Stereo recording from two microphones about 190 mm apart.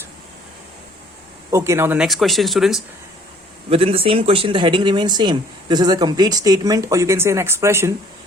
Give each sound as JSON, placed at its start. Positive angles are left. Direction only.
{"t": 1.5, "sound": "speech", "side_deg": -15}
{"t": 3.7, "sound": "speech", "side_deg": -30}